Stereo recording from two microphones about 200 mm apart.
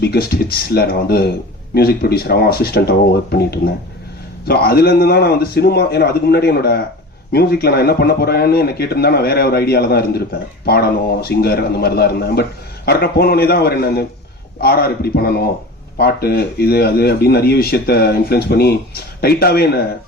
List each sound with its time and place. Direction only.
0.0 s speech: 50° left (ahead or behind)